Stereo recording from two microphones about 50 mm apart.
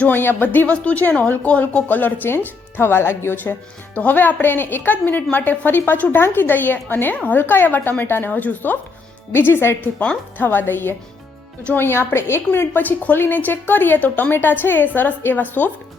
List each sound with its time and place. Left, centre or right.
0.1 s a woman's voice: left
3.9 s a woman's voice: left
9.3 s speech: left
10.3 s speech: left
12.5 s a woman's voice: left